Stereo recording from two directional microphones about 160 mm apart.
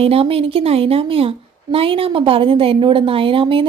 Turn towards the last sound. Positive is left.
turn(degrees=-35)  # may be behind; listen again after turning